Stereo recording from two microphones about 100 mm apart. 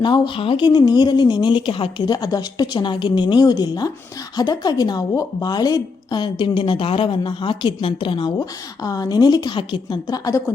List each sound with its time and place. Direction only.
0.0 s speech: 55° left (ahead or behind)
7.2 s a woman's voice: 55° left (ahead or behind)
8.4 s a woman's voice: 35° left (ahead or behind); by 10.0 s 55° left (ahead or behind)
10.1 s a woman's voice: 35° left (ahead or behind)